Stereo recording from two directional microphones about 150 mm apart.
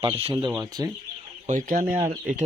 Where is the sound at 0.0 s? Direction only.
40° right (ahead or behind).